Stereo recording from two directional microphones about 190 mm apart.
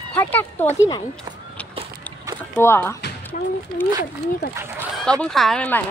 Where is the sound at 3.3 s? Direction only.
45° left (ahead or behind).